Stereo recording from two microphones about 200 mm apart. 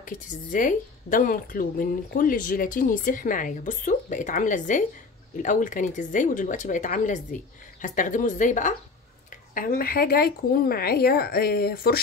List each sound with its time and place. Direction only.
0.0 s speech: 40° left (ahead or behind)